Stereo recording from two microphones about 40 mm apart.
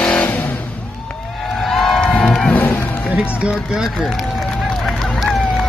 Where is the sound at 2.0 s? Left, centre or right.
Centre.